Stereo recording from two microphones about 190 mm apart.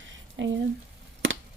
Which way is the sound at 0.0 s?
75° right (ahead or behind).